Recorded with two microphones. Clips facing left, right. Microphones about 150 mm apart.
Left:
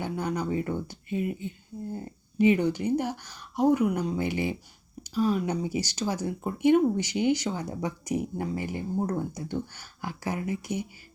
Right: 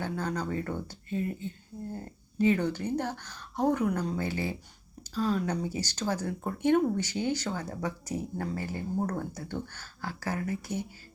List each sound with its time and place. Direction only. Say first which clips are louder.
0.0 s speech: left 2 dB; 15° left (ahead or behind)